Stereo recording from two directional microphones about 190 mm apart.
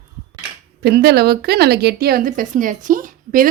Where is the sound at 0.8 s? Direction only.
55° right (ahead or behind).